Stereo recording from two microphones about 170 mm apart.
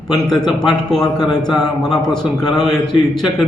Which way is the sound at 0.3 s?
5° left (ahead or behind).